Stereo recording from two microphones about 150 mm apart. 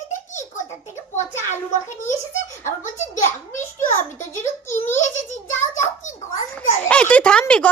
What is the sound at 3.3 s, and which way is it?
Speech, 15° left (ahead or behind).